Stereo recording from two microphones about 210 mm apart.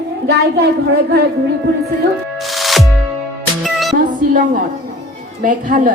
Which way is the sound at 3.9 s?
40° right (ahead or behind).